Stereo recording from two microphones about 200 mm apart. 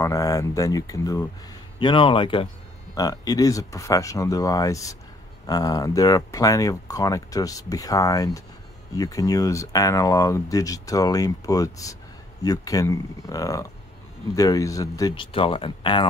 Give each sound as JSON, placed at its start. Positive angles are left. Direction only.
{"t": 0.0, "sound": "speech", "side_deg": 15}